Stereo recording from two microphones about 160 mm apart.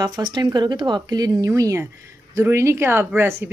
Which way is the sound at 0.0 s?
25° right (ahead or behind).